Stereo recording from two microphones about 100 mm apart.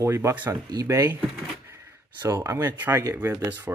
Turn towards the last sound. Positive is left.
turn(degrees=-20)  # may be behind; listen again after turning